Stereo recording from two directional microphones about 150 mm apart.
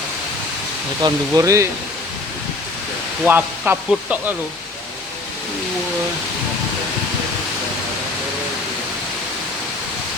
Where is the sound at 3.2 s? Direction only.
10° right (ahead or behind).